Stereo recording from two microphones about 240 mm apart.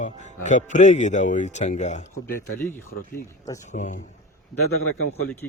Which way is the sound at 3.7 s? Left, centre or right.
Left.